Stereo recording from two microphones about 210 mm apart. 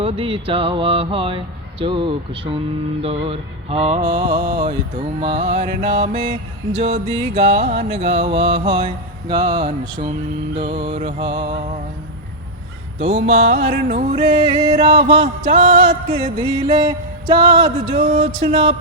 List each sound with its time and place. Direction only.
0.0 s music: 25° right (ahead or behind)
13.0 s music: 30° right (ahead or behind)
14.2 s music: 25° right (ahead or behind)
16.6 s music: 20° right (ahead or behind)